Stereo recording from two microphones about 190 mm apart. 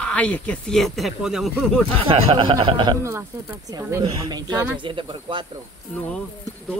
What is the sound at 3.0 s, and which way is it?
Speech, 15° right (ahead or behind).